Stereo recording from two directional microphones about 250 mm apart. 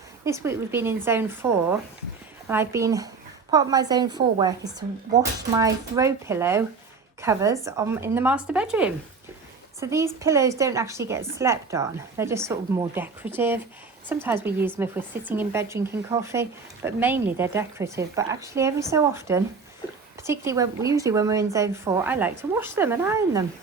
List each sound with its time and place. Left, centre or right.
0.3 s speech: centre